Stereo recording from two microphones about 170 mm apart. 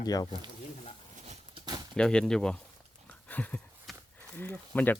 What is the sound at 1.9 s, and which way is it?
Speech, 5° left (ahead or behind).